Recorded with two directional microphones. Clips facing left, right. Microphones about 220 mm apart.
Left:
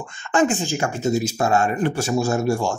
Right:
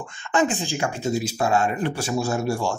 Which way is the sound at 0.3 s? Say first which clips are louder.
Left 3 dB; 45° left (ahead or behind).